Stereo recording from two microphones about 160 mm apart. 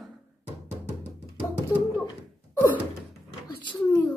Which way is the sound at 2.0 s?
15° left (ahead or behind).